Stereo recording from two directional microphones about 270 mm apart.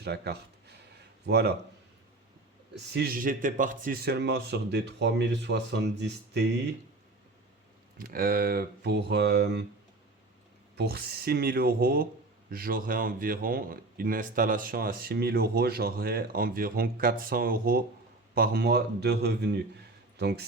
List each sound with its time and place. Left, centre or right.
0.0 s a sound: right
1.3 s speech: right
2.9 s speech: right
7.9 s speech: right
10.8 s speech: right